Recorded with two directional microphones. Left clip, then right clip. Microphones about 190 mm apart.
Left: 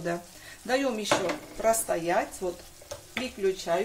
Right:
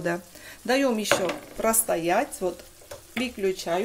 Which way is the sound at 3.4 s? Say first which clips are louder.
Even; 50° right (ahead or behind).